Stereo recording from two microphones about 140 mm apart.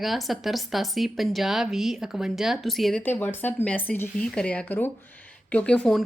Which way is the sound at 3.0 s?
15° left (ahead or behind).